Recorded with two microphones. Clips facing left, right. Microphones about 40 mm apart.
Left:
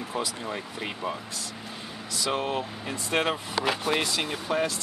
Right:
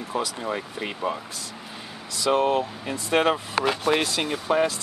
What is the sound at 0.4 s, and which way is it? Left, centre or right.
Speech, centre.